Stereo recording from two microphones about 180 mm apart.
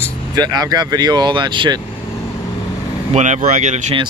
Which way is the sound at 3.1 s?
40° right (ahead or behind).